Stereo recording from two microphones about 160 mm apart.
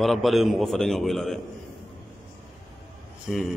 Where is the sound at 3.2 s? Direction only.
Centre (ahead or behind).